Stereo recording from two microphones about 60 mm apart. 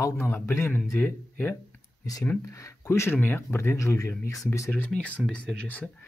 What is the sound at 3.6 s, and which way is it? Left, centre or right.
Speech, left.